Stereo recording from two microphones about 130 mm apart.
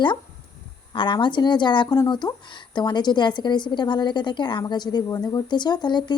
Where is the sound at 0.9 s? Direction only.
40° left (ahead or behind).